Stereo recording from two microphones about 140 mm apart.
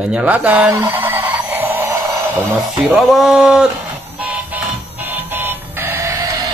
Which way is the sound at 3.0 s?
Centre (ahead or behind).